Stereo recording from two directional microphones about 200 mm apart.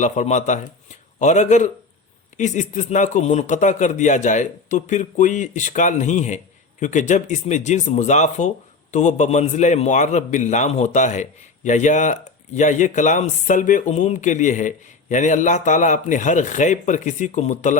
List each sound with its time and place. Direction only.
0.0 s a man's voice: 35° left (ahead or behind)